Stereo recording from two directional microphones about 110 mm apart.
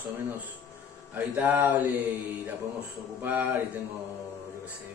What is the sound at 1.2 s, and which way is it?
Speech, 15° right (ahead or behind).